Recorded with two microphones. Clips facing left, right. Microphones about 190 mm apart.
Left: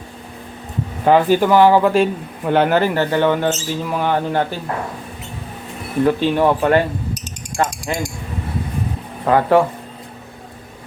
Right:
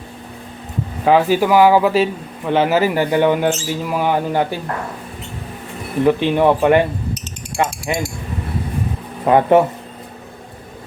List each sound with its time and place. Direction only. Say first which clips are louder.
1.0 s speech: left 1 dB; 5° right (ahead or behind)
6.1 s speech: right 2 dB; 15° right (ahead or behind)
7.5 s a sound: right 1 dB; 5° right (ahead or behind)
9.2 s speech: right 2 dB; 20° right (ahead or behind)